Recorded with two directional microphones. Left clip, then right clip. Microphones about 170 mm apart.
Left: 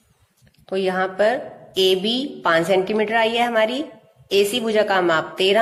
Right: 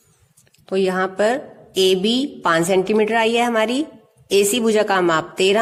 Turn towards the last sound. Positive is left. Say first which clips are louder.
# right 1 dB
turn(degrees=-40)  # may be behind; listen again after turning